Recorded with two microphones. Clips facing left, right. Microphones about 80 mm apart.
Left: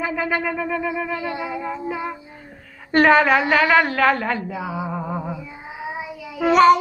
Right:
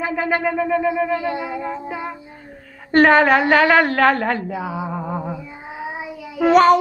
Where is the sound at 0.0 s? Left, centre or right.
Right.